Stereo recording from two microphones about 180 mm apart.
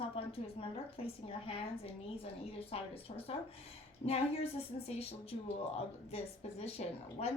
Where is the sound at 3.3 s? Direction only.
35° left (ahead or behind).